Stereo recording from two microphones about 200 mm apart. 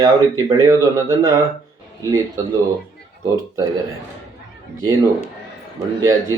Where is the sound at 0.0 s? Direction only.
15° right (ahead or behind).